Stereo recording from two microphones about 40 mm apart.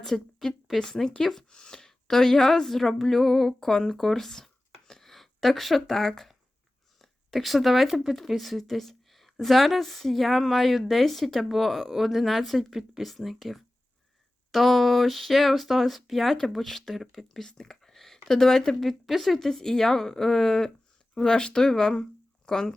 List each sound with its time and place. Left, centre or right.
0.3 s a sound: centre
0.8 s a woman's voice: centre
8.1 s speech: centre
18.8 s a woman's voice: centre